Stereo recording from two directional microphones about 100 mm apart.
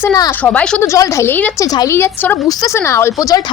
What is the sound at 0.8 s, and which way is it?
A woman's voice, 30° left (ahead or behind).